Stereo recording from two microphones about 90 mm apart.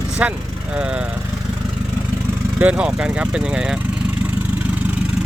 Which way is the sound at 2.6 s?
15° right (ahead or behind).